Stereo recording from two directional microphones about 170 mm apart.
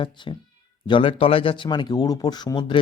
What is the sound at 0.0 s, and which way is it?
Speech, 30° left (ahead or behind).